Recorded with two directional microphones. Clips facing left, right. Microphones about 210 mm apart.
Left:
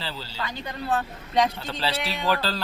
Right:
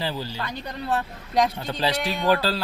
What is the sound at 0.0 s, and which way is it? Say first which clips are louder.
Speech: right 5 dB; 15° right (ahead or behind).